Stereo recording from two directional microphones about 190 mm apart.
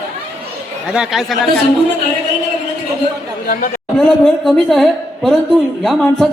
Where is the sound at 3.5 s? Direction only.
50° left (ahead or behind).